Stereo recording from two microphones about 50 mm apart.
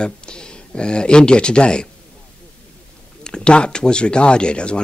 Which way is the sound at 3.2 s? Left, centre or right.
Centre.